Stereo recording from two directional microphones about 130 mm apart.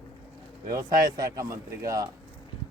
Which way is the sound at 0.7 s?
30° right (ahead or behind).